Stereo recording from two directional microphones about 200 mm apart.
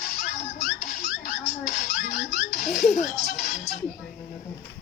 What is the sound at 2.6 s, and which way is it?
Music, 35° left (ahead or behind).